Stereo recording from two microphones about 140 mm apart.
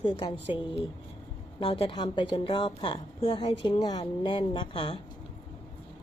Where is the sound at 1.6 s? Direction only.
40° left (ahead or behind).